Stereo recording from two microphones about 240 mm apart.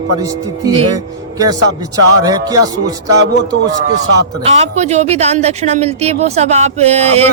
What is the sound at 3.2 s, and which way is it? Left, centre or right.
Speech, right.